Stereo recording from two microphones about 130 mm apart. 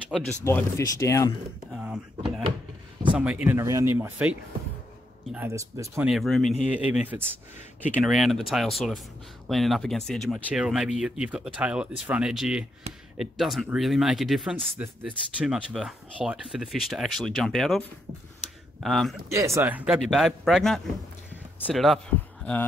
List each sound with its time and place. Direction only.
0.5 s speech: 20° left (ahead or behind)
1.7 s speech: 5° right (ahead or behind); by 3.9 s 25° right (ahead or behind)
3.9 s speech: 10° right (ahead or behind)
5.5 s speech: 25° right (ahead or behind)
6.0 s speech: centre (ahead or behind)
6.6 s speech: 10° right (ahead or behind)
8.0 s speech: centre (ahead or behind)
12.9 s speech: 55° right (ahead or behind)
13.2 s speech: centre (ahead or behind)
19.3 s speech: 25° right (ahead or behind)
20.1 s speech: centre (ahead or behind)